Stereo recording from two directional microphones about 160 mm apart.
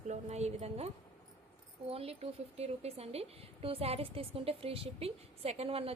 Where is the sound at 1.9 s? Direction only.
35° right (ahead or behind).